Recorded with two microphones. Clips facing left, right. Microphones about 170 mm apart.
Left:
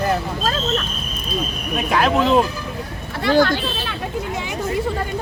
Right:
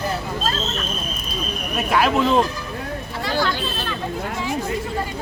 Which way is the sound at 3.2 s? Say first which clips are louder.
Left 8 dB; 50° left (ahead or behind).